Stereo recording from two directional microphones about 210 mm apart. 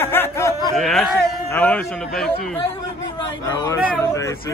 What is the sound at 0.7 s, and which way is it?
Speech, centre (ahead or behind).